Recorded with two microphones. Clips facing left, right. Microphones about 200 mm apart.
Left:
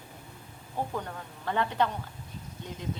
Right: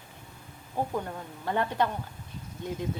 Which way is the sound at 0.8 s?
15° right (ahead or behind).